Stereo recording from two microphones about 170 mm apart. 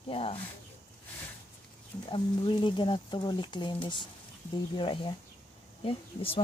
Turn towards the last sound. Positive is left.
turn(degrees=35)  # may be behind; listen again after turning